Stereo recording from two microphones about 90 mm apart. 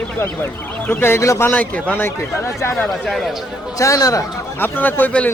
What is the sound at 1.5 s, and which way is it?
Speech, 20° left (ahead or behind).